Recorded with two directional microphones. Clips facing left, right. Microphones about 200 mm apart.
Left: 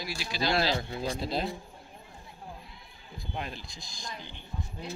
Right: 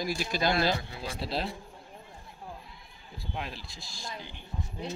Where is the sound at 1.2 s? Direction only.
5° right (ahead or behind).